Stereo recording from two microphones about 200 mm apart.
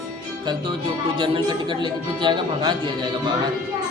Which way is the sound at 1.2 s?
25° right (ahead or behind).